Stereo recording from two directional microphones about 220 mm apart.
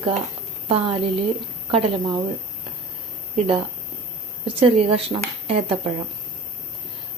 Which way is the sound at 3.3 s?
25° right (ahead or behind).